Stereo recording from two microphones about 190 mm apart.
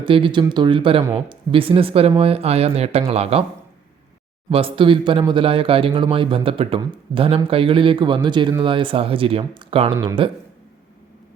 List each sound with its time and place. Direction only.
0.0 s speech: 25° right (ahead or behind)
4.4 s speech: 30° right (ahead or behind)